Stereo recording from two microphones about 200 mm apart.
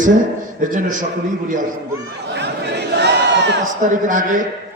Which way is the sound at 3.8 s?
40° right (ahead or behind).